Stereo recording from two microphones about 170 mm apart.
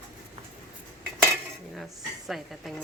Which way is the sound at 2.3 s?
Centre (ahead or behind).